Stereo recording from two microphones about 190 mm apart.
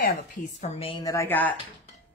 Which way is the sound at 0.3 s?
35° left (ahead or behind).